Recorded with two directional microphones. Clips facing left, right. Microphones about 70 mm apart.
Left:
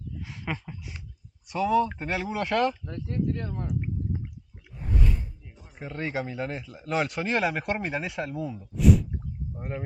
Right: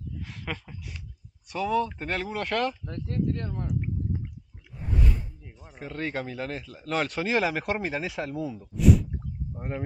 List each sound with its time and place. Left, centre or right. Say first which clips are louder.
0.2 s a sound: left 3 dB; centre
1.5 s speech: left 3 dB; centre
2.8 s speech: even; centre
5.8 s speech: left 1 dB; centre